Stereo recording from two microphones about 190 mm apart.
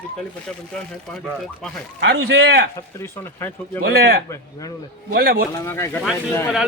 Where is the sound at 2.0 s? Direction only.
65° right (ahead or behind).